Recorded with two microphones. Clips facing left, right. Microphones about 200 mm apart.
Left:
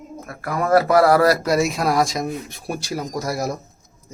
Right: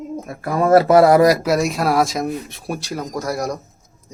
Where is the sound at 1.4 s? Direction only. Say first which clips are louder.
Right 1 dB; centre (ahead or behind).